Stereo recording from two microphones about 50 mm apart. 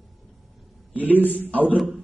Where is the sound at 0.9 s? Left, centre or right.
Right.